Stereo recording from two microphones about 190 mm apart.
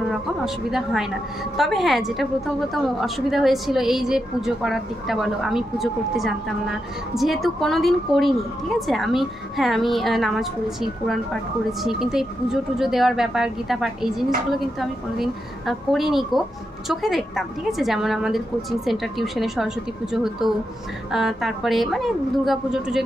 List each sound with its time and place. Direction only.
0.7 s a woman's voice: centre (ahead or behind)